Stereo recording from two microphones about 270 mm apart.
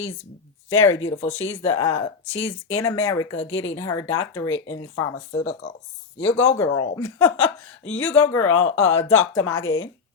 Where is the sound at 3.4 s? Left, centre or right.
Left.